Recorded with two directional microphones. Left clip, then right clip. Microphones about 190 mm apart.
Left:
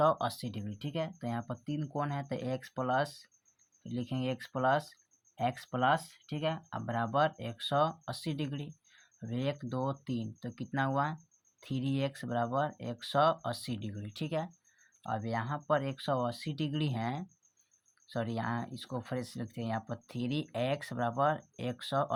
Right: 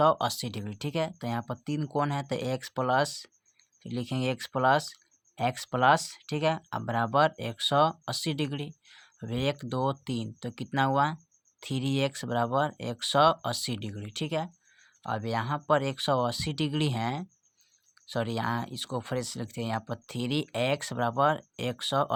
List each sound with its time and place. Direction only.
0.0 s speech: 30° right (ahead or behind)